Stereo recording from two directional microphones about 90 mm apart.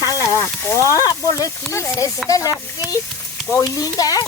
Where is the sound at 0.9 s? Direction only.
40° left (ahead or behind).